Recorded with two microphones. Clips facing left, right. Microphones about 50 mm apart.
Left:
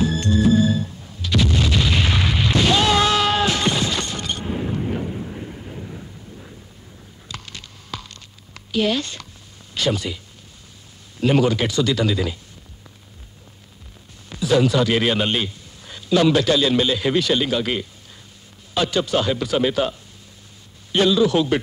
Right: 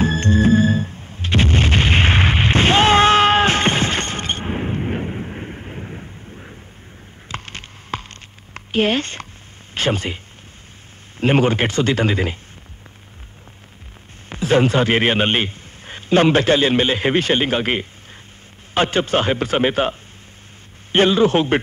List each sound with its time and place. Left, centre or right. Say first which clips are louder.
0.0 s music: right 2 dB; right
7.2 s a sound: right 5 dB; right
9.8 s speech: right 2 dB; right
14.3 s a man's voice: right 2 dB; right